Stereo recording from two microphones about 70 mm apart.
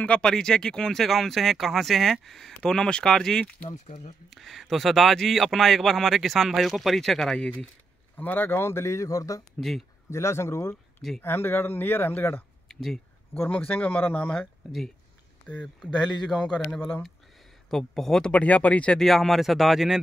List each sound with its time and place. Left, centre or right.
0.0 s speech: centre
7.3 s speech: centre
8.2 s speech: left
9.6 s speech: centre
10.0 s speech: left
11.1 s speech: left
12.6 s a sound: centre
13.5 s speech: centre
18.3 s speech: left
18.9 s speech: centre